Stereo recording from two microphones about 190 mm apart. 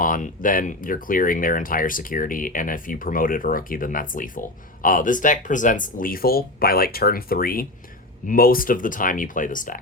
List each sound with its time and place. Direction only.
0.0 s speech: 45° left (ahead or behind)